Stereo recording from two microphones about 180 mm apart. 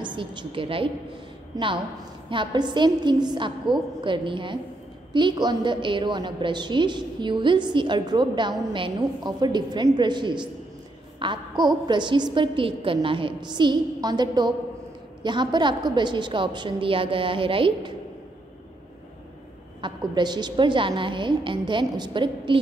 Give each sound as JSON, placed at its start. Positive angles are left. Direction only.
{"t": 0.0, "sound": "a woman's voice", "side_deg": -25}
{"t": 2.2, "sound": "a woman's voice", "side_deg": -25}
{"t": 19.8, "sound": "a woman's voice", "side_deg": -25}